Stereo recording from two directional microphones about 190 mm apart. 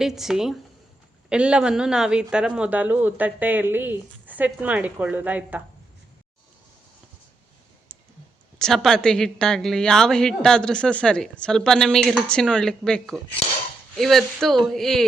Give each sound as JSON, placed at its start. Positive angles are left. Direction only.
{"t": 0.0, "sound": "a woman's voice", "side_deg": 0}
{"t": 8.5, "sound": "a woman's voice", "side_deg": 5}